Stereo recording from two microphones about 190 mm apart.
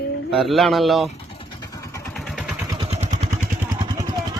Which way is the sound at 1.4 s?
20° left (ahead or behind).